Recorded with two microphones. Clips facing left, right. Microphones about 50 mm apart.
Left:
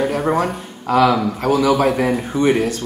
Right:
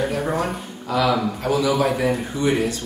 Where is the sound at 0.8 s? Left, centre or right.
Left.